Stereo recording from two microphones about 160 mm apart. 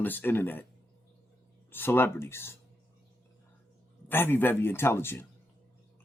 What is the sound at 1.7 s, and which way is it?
Speech, 15° left (ahead or behind).